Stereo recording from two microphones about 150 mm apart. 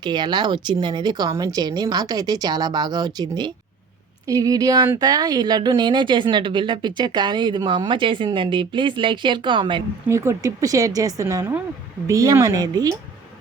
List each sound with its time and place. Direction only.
0.0 s a woman's voice: 30° right (ahead or behind)
10.1 s speech: 20° right (ahead or behind)